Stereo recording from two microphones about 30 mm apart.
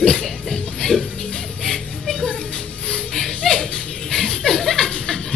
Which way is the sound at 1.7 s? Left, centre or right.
Centre.